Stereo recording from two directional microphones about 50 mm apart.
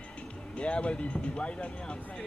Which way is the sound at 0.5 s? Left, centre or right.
Left.